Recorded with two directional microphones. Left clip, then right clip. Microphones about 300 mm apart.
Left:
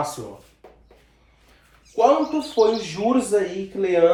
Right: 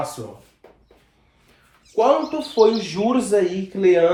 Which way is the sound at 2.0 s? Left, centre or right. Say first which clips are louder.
Even; centre.